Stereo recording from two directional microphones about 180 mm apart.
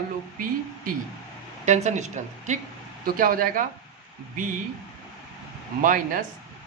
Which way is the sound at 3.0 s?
50° right (ahead or behind).